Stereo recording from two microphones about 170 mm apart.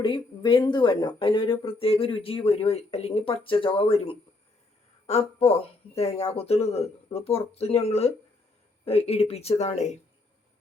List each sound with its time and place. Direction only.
0.0 s speech: 30° left (ahead or behind)